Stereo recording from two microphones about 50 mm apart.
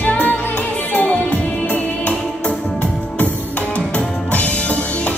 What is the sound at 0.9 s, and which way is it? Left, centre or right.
Music, left.